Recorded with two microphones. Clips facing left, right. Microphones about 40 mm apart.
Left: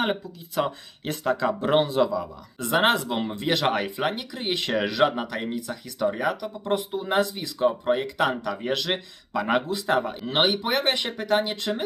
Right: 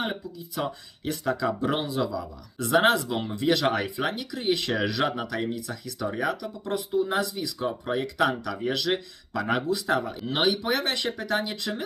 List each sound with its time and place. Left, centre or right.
0.0 s speech: left
6.5 s speech: left